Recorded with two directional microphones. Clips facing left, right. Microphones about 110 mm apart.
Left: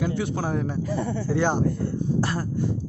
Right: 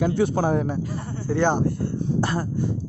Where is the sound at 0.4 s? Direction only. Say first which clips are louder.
Right 5 dB; 20° right (ahead or behind).